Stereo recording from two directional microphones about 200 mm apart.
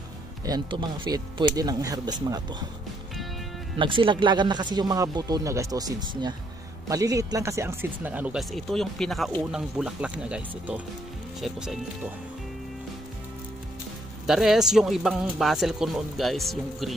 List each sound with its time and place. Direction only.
0.5 s speech: 25° right (ahead or behind)
3.7 s speech: 25° right (ahead or behind); by 11.8 s centre (ahead or behind)
14.2 s speech: centre (ahead or behind)